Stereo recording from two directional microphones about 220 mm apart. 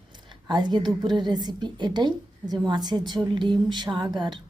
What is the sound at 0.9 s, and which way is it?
A woman's voice, 20° right (ahead or behind).